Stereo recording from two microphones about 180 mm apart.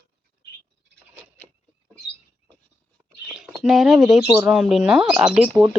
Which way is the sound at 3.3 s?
5° right (ahead or behind).